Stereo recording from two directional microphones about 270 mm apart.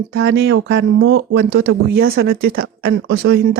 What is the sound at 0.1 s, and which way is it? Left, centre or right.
A woman's voice, right.